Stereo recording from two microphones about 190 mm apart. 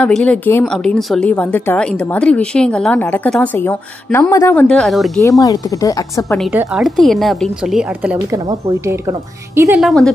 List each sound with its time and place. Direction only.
0.0 s a woman's voice: 5° left (ahead or behind)
5.4 s speech: 20° left (ahead or behind)
6.7 s a woman's voice: centre (ahead or behind); by 9.1 s 15° right (ahead or behind)
9.8 s a woman's voice: centre (ahead or behind)